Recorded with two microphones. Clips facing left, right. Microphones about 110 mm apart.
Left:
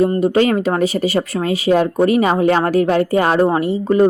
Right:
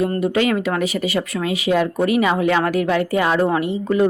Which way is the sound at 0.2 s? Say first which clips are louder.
Left 4 dB; 35° left (ahead or behind).